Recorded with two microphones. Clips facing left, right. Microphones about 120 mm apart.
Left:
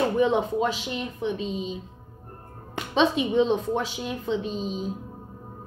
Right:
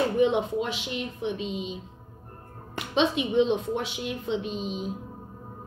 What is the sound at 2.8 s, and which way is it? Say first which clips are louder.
A woman's voice: left 2 dB; 35° left (ahead or behind).